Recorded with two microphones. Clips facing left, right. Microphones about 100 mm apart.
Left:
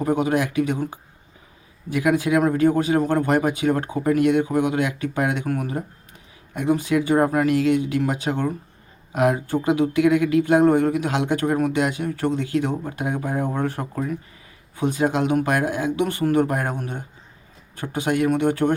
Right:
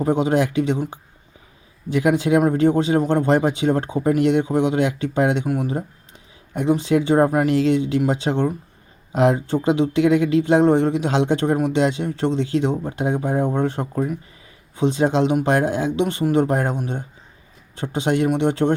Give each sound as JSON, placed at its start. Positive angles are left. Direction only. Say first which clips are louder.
{"t": 0.0, "sound": "speech", "louder": "right 2 dB", "side_deg": -25}